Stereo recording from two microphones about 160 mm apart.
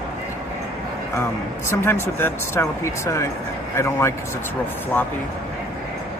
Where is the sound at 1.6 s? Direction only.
15° left (ahead or behind).